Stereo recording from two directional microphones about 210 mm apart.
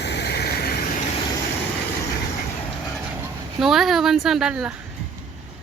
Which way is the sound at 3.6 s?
Centre (ahead or behind).